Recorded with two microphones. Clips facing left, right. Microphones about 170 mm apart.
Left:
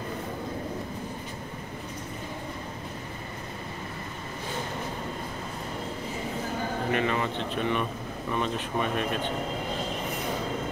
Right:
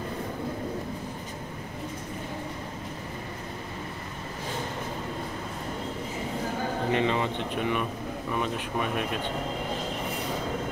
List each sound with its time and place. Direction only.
6.9 s speech: 20° right (ahead or behind)